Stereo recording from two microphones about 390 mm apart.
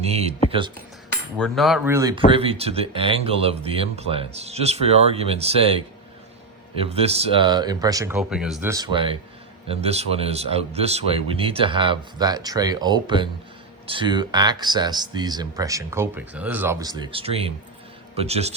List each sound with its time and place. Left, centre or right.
0.1 s speech: centre
1.4 s a man's voice: centre